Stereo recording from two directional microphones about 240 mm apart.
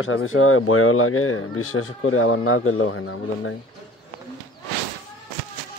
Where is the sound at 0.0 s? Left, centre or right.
Left.